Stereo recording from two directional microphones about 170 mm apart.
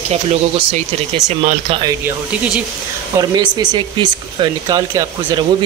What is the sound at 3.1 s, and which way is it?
Speech, 25° right (ahead or behind).